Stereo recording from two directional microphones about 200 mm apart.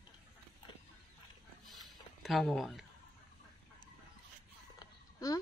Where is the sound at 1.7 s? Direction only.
Centre (ahead or behind).